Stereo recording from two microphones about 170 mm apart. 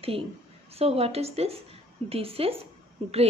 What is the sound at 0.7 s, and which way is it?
A woman's voice, 35° right (ahead or behind).